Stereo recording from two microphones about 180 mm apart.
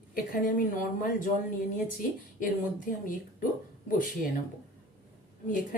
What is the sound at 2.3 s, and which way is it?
Speech, 50° left (ahead or behind).